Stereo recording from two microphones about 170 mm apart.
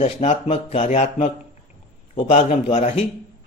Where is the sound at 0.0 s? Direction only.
40° left (ahead or behind).